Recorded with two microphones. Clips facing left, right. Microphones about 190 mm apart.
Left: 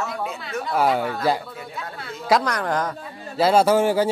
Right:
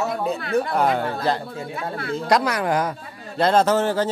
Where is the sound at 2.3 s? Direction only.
10° right (ahead or behind).